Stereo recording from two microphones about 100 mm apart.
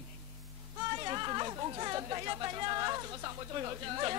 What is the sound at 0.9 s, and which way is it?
Speech, 40° right (ahead or behind).